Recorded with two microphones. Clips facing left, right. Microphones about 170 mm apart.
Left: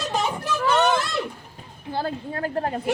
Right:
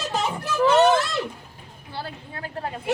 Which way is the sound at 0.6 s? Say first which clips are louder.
Right 4 dB; 30° right (ahead or behind).